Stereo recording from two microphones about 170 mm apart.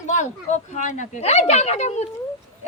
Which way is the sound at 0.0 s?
45° left (ahead or behind).